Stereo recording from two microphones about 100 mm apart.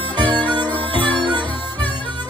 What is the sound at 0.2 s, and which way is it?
Music, 55° right (ahead or behind).